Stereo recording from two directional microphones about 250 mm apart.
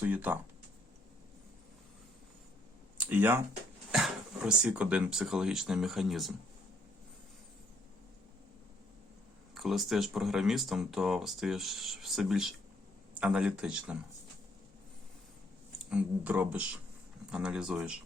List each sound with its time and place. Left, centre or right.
0.0 s speech: centre
3.0 s speech: centre
9.6 s speech: centre
15.9 s speech: centre